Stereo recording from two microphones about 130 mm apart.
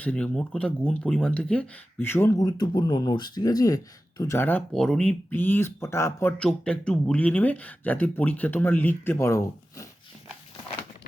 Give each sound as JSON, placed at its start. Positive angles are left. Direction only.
{"t": 0.0, "sound": "speech", "side_deg": 10}
{"t": 6.4, "sound": "speech", "side_deg": 10}